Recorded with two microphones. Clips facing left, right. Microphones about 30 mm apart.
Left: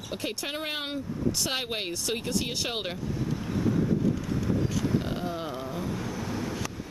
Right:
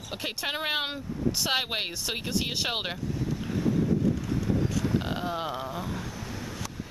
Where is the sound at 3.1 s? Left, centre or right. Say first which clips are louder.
Even; centre.